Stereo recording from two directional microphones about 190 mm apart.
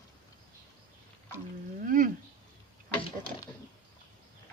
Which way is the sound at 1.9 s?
45° right (ahead or behind).